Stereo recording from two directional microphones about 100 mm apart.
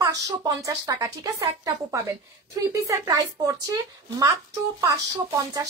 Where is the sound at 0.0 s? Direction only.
35° right (ahead or behind).